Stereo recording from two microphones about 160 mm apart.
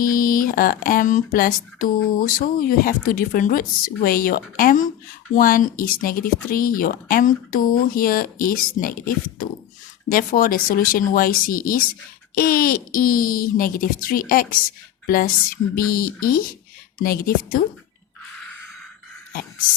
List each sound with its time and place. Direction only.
0.0 s speech: 60° left (ahead or behind)